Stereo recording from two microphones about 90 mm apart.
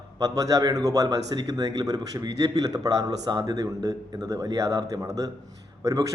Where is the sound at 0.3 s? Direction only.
40° right (ahead or behind).